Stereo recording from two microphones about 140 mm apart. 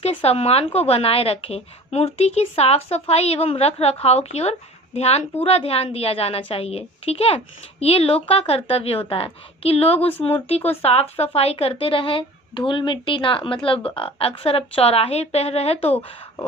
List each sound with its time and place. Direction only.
0.0 s a woman's voice: 45° left (ahead or behind)
11.3 s a woman's voice: 40° left (ahead or behind)